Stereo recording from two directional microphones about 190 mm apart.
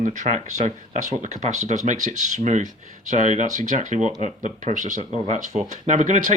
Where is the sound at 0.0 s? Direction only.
40° right (ahead or behind).